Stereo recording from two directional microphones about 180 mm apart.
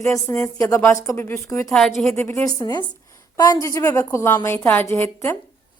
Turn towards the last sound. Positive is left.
turn(degrees=10)  # may be behind; listen again after turning